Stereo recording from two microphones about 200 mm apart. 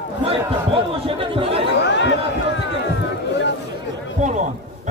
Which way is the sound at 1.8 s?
60° left (ahead or behind).